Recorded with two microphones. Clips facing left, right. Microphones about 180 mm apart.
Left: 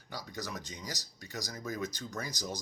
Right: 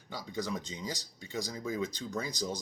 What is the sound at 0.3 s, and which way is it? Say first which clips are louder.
Speech: right 8 dB; 25° right (ahead or behind).